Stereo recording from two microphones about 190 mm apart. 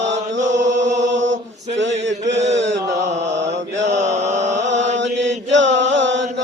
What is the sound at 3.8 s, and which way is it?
Mantra, 35° right (ahead or behind).